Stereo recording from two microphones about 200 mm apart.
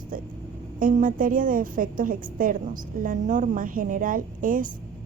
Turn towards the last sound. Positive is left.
turn(degrees=-45)  # may be behind; listen again after turning